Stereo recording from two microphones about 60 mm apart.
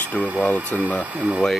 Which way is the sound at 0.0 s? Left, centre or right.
Left.